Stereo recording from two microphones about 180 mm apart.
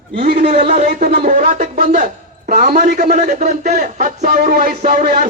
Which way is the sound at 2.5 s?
50° right (ahead or behind).